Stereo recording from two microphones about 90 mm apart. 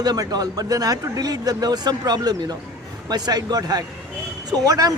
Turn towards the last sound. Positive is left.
turn(degrees=-45)  # may be behind; listen again after turning